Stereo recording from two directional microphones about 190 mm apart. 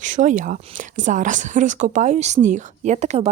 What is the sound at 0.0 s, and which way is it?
Speech, 40° right (ahead or behind).